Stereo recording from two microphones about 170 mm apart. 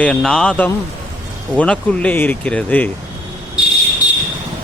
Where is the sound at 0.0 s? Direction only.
5° left (ahead or behind).